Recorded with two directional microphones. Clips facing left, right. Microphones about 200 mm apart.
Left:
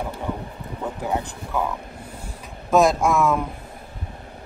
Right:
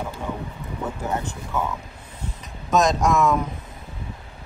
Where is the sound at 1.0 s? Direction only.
15° left (ahead or behind).